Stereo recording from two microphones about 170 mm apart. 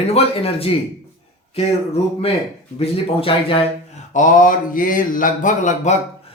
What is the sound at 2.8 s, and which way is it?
Speech, 35° left (ahead or behind).